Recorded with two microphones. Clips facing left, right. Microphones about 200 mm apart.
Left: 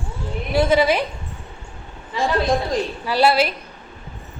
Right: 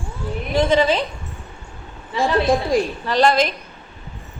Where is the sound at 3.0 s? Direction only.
10° left (ahead or behind).